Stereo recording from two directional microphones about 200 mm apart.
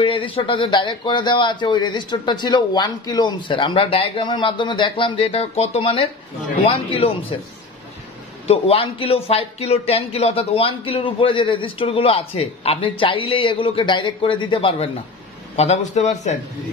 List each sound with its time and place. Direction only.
0.0 s a man's voice: 25° left (ahead or behind)
8.5 s a man's voice: 30° left (ahead or behind)